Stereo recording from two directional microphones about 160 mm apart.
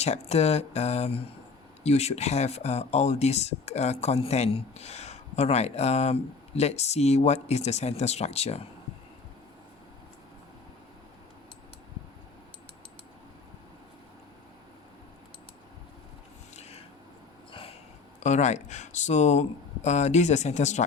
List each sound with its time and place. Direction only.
0.0 s speech: 45° left (ahead or behind)
16.6 s a sound: 40° left (ahead or behind)
18.2 s speech: 45° left (ahead or behind)